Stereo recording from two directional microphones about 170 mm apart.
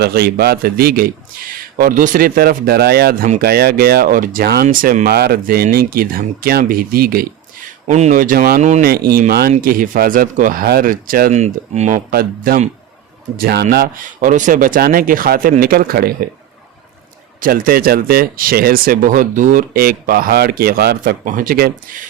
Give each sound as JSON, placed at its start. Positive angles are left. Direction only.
{"t": 0.0, "sound": "speech", "side_deg": -70}
{"t": 7.9, "sound": "speech", "side_deg": -45}
{"t": 8.9, "sound": "speech", "side_deg": -65}
{"t": 13.4, "sound": "speech", "side_deg": -65}
{"t": 17.4, "sound": "speech", "side_deg": -60}